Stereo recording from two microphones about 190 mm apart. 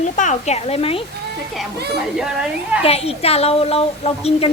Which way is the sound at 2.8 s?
30° left (ahead or behind).